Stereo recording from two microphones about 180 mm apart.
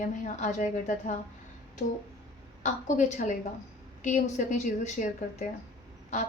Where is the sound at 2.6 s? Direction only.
45° left (ahead or behind).